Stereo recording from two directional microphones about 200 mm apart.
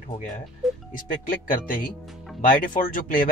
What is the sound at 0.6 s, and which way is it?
Music, centre (ahead or behind).